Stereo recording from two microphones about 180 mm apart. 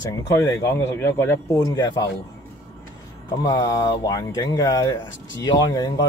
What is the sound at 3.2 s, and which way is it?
Speech, 25° left (ahead or behind).